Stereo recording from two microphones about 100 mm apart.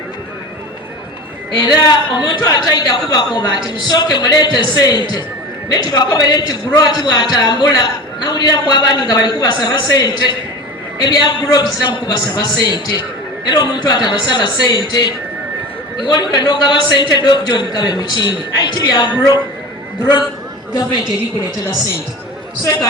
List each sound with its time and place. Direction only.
1.5 s a man's voice: 45° left (ahead or behind)
16.0 s a man's voice: 45° left (ahead or behind)